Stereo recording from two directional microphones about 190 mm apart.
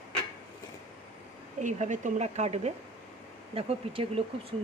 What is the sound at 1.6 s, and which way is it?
Speech, 40° right (ahead or behind).